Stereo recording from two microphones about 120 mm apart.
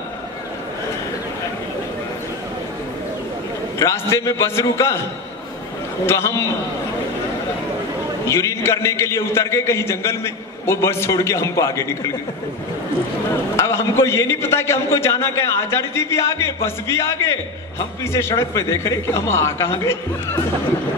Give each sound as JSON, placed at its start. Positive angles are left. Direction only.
{"t": 3.8, "sound": "a man's voice", "side_deg": 25}
{"t": 6.0, "sound": "a man's voice", "side_deg": 25}
{"t": 8.3, "sound": "a man's voice", "side_deg": 25}
{"t": 13.6, "sound": "a man's voice", "side_deg": 25}